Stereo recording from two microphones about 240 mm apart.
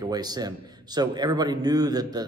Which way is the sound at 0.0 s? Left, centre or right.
Centre.